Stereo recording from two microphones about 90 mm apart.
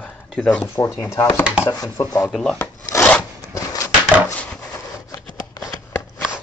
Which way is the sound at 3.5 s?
35° left (ahead or behind).